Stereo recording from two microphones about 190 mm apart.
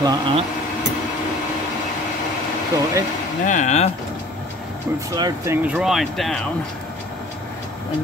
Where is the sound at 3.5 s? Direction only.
40° left (ahead or behind).